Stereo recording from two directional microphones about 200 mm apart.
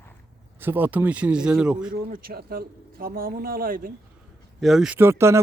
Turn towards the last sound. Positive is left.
turn(degrees=-15)  # may be behind; listen again after turning